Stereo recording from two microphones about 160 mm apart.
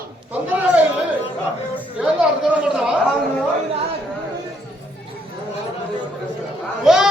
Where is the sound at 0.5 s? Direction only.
10° right (ahead or behind).